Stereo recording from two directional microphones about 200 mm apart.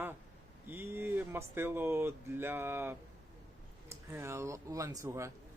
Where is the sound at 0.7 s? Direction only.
10° right (ahead or behind).